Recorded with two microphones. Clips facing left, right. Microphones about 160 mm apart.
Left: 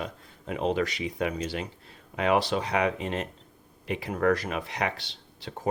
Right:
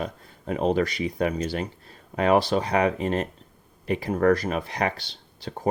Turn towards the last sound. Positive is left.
turn(degrees=-35)  # may be behind; listen again after turning